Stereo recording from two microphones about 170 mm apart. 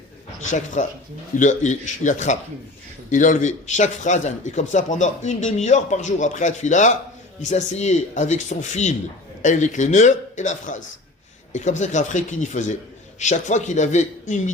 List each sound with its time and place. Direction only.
0.5 s speech: 45° left (ahead or behind)